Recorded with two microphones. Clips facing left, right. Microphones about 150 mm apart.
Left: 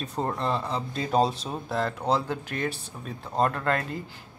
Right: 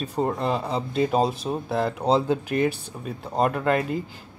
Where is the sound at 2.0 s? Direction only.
20° right (ahead or behind).